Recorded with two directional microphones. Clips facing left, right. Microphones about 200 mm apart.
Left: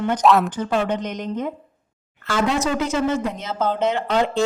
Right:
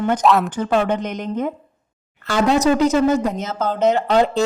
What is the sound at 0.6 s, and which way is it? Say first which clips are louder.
Speech: right 3 dB; 55° right (ahead or behind).